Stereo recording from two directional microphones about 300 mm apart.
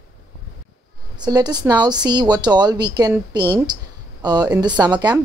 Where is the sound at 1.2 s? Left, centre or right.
Centre.